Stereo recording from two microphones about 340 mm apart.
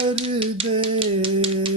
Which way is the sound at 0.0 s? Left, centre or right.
Centre.